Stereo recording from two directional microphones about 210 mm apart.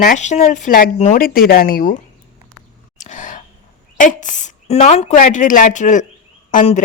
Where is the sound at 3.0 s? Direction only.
35° left (ahead or behind).